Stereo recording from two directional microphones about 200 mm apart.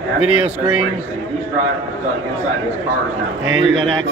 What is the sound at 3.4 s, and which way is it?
Speech, 80° right.